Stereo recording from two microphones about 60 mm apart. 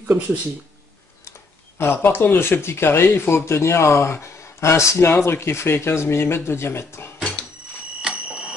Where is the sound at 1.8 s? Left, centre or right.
Left.